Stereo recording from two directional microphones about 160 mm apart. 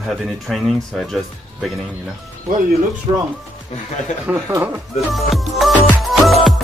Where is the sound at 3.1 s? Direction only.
30° right (ahead or behind).